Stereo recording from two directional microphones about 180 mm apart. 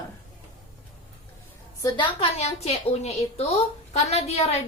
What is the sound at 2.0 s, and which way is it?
A woman's voice, 35° left (ahead or behind).